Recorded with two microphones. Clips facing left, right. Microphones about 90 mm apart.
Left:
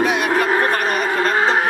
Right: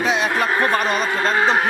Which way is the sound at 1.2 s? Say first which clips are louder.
Left 1 dB; 20° right (ahead or behind).